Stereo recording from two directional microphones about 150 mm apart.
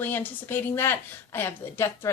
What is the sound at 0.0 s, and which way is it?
Speech, 10° left (ahead or behind).